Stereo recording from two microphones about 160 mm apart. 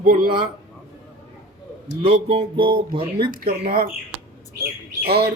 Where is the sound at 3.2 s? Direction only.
70° right (ahead or behind).